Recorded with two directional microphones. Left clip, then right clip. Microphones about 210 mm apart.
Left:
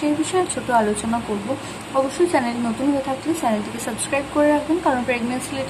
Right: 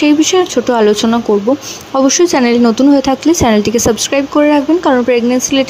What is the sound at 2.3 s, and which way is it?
Speech, 40° right (ahead or behind).